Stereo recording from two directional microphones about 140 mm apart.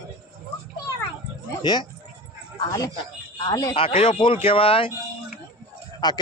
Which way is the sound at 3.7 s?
40° left (ahead or behind).